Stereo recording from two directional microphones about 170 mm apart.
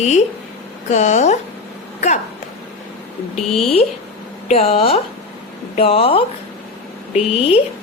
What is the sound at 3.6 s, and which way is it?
Speech, 35° left (ahead or behind).